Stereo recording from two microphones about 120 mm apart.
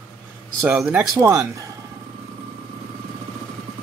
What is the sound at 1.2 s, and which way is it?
Speech, 25° right (ahead or behind).